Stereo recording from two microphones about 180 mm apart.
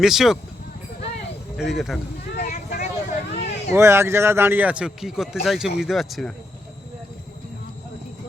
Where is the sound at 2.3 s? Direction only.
55° left (ahead or behind).